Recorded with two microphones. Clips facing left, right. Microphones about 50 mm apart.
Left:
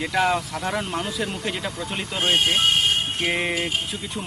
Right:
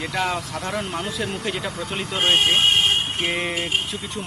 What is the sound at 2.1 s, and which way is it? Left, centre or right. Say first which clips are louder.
Speech: right 2 dB; centre.